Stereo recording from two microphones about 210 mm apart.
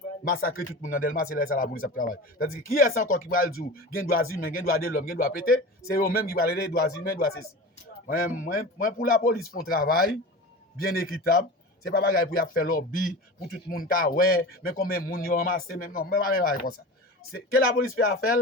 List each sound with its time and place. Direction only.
0.4 s a man's voice: 40° left (ahead or behind)